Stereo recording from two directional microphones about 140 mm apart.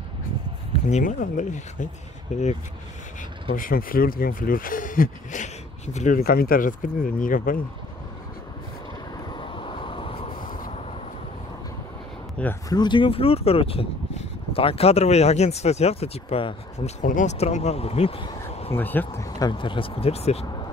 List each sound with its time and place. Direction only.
0.8 s speech: 65° left (ahead or behind)
3.5 s speech: 85° left
9.4 s vehicle: 40° left (ahead or behind)
10.4 s vehicle: 80° left
12.6 s speech: 30° left (ahead or behind)
17.0 s speech: 65° left (ahead or behind); by 18.8 s 40° left (ahead or behind)
18.8 s speech: 15° left (ahead or behind)
19.2 s speech: 30° left (ahead or behind); by 20.4 s 50° left (ahead or behind)